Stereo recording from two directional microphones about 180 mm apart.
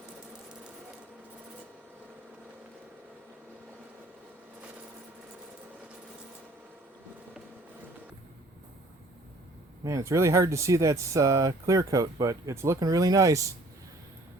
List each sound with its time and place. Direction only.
9.8 s speech: 15° right (ahead or behind)